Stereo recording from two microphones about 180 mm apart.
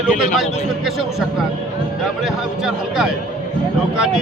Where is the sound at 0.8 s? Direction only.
Centre (ahead or behind).